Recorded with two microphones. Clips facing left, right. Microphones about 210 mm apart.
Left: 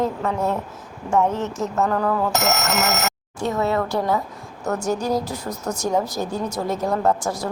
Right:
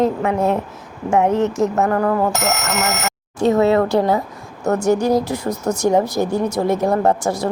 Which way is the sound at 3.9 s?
70° right (ahead or behind).